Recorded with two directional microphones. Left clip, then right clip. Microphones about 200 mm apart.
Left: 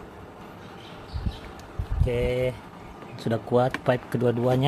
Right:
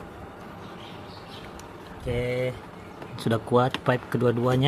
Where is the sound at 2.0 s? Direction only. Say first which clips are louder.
Left 2 dB; 15° left (ahead or behind).